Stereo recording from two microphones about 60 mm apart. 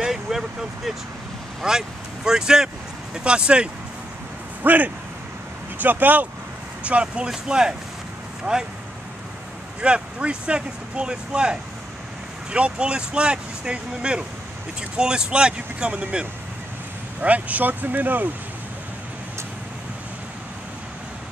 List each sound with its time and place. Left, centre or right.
0.0 s speech: centre
4.6 s speech: right
9.8 s speech: centre
12.5 s speech: centre